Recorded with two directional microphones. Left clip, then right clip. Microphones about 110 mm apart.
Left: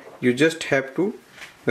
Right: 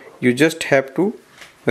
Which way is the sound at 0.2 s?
45° right (ahead or behind).